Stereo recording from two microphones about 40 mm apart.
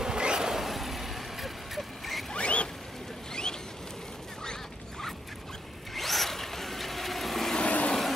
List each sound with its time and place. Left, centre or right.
0.0 s vehicle: centre
0.7 s vehicle: centre
2.3 s zipper: left
5.9 s zipper: centre
7.6 s vehicle: left